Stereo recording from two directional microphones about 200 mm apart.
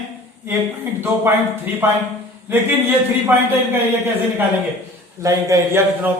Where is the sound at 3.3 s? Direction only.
10° right (ahead or behind).